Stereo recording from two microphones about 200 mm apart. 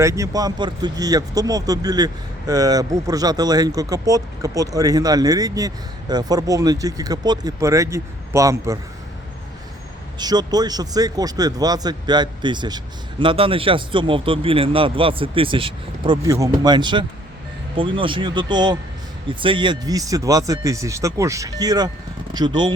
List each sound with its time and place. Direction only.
0.0 s speech: 15° right (ahead or behind)
10.2 s speech: 20° right (ahead or behind)